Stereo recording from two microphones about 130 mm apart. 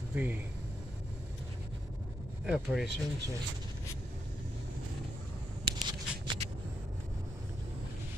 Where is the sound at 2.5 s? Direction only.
5° right (ahead or behind).